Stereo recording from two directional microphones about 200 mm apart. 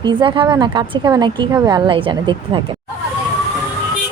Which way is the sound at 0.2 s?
25° right (ahead or behind).